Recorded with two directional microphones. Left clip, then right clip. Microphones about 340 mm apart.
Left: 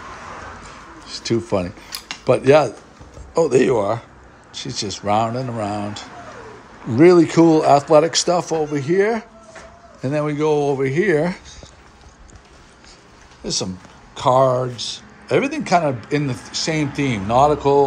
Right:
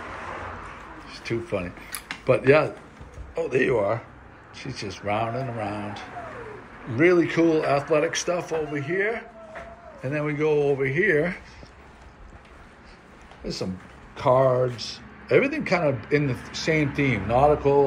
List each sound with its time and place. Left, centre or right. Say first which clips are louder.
1.0 s speech: left 8 dB; centre
7.0 s speech: left 8 dB; centre
13.4 s speech: left 7 dB; centre
14.8 s speech: left 7 dB; left
15.2 s speech: left 2 dB; centre